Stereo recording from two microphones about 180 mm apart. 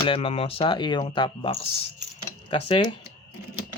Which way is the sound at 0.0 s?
30° left (ahead or behind).